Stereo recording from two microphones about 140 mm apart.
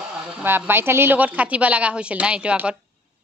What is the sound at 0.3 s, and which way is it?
Speech, 10° right (ahead or behind).